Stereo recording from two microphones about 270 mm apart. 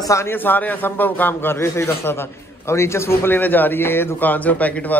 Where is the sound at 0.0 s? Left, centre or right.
Centre.